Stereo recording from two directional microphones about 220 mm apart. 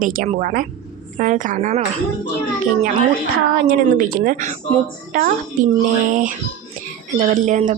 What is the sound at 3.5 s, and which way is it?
A woman's voice, 40° right (ahead or behind).